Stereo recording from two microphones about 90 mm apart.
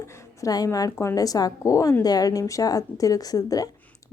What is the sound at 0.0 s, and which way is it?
A woman's voice, 30° left (ahead or behind).